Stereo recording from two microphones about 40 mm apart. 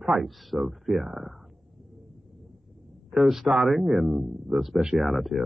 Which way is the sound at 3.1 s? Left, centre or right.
Centre.